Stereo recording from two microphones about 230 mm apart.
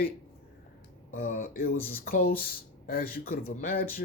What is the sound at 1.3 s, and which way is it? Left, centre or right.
Speech, left.